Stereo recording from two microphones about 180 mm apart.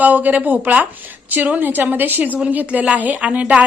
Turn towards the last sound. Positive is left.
turn(degrees=-10)  # may be behind; listen again after turning